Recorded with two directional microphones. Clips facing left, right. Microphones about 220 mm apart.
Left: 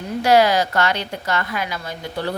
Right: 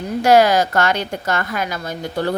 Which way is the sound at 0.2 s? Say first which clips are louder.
Right 2 dB; 45° right (ahead or behind).